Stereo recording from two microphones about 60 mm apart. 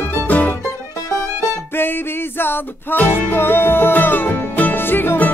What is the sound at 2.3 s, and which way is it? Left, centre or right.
Music, left.